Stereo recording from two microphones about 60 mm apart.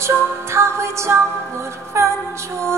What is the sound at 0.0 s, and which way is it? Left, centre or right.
Music, right.